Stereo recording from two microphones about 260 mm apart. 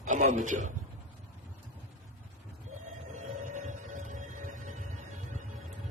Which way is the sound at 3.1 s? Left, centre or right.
Right.